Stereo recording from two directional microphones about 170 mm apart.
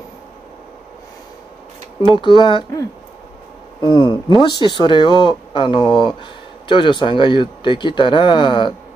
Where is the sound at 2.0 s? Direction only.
30° left (ahead or behind).